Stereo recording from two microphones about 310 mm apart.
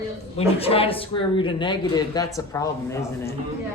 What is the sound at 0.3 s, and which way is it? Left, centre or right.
Speech, centre.